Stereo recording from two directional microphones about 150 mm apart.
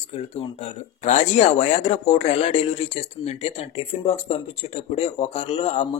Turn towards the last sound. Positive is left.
turn(degrees=40)  # may be behind; listen again after turning